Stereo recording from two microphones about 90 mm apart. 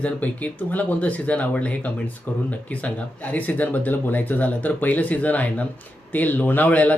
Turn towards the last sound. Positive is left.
turn(degrees=15)  # may be behind; listen again after turning